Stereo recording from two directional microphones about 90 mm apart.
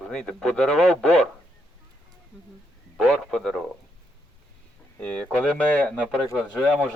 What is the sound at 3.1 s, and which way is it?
Speech, 5° left (ahead or behind).